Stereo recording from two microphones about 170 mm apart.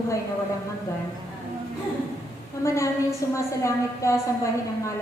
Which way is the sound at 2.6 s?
15° left (ahead or behind).